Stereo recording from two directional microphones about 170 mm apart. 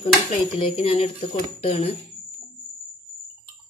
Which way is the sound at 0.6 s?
30° left (ahead or behind).